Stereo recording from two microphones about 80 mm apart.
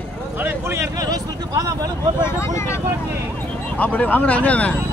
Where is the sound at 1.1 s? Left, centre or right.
Right.